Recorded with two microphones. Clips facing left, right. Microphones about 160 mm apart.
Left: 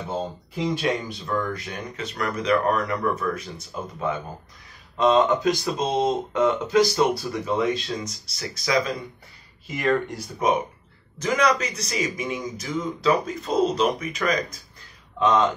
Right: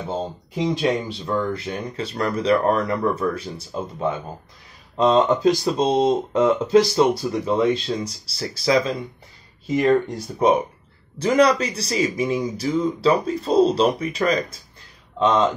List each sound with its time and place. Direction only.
0.1 s speech: 25° right (ahead or behind)
10.4 s speech: 30° right (ahead or behind)